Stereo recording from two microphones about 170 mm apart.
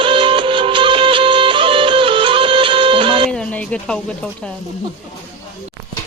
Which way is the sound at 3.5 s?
5° left (ahead or behind).